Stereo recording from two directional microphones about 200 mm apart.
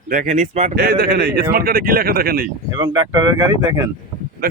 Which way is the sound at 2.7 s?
20° right (ahead or behind).